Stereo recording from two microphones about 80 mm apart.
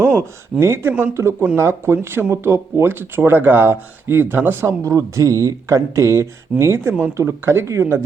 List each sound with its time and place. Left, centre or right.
0.6 s speech: right
4.8 s speech: right